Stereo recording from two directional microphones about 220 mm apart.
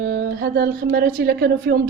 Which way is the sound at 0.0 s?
40° right (ahead or behind).